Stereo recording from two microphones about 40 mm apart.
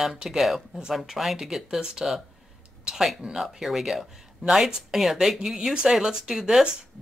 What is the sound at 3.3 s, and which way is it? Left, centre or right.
Speech, centre.